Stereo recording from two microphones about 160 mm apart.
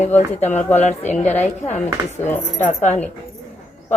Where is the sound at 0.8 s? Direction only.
45° left (ahead or behind).